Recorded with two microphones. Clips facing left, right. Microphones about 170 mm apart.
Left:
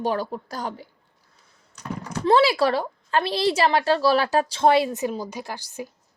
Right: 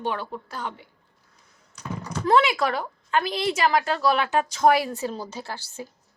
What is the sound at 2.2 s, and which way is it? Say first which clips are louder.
A woman's voice: left 3 dB; 30° left (ahead or behind).